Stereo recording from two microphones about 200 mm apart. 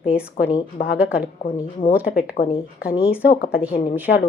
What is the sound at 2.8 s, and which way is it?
Speech, 50° left (ahead or behind).